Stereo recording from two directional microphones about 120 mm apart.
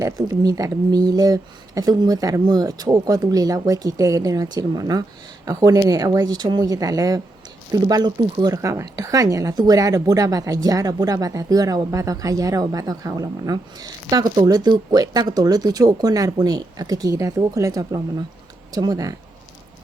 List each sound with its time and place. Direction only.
0.0 s speech: 30° right (ahead or behind)